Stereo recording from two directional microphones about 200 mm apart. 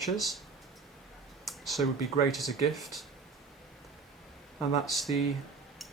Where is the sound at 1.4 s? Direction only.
Centre (ahead or behind).